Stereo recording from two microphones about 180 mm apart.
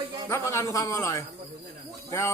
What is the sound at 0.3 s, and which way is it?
A man's voice, 15° left (ahead or behind).